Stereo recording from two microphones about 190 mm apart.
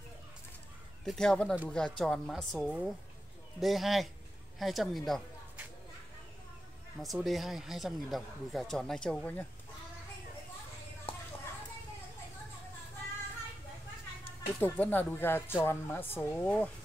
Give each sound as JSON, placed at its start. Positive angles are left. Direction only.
{"t": 1.0, "sound": "speech", "side_deg": 5}
{"t": 7.0, "sound": "speech", "side_deg": 0}
{"t": 11.1, "sound": "a sound", "side_deg": 30}
{"t": 14.6, "sound": "speech", "side_deg": 10}